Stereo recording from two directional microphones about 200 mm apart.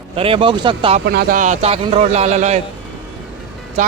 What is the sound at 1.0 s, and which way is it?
A man's voice, 45° right (ahead or behind).